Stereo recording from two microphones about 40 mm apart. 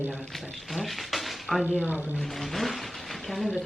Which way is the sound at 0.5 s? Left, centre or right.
Centre.